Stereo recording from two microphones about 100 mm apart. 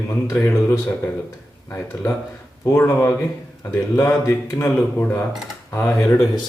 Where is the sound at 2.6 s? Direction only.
25° left (ahead or behind).